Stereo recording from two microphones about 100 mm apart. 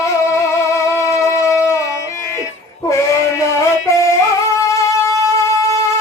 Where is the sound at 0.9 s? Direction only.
30° left (ahead or behind).